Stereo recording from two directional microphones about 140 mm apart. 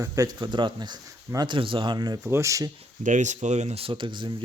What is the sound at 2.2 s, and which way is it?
Speech, 20° right (ahead or behind).